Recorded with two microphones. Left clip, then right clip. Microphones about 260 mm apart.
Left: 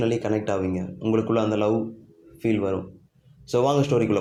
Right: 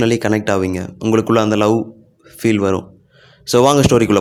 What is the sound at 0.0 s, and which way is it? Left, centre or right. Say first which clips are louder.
Speech: right 8 dB; right.